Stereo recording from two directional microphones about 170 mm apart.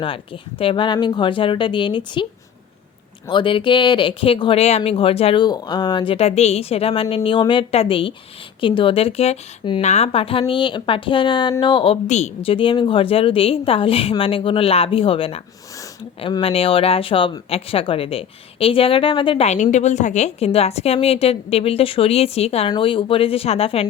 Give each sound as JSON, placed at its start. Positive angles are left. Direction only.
{"t": 0.6, "sound": "speech", "side_deg": 30}
{"t": 3.2, "sound": "speech", "side_deg": 30}